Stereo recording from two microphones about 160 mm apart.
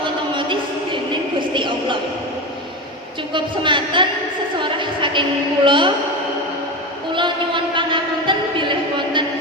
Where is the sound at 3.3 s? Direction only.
30° right (ahead or behind).